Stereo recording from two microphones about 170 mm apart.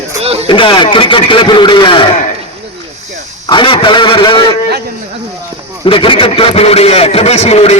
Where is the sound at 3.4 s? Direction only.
30° left (ahead or behind).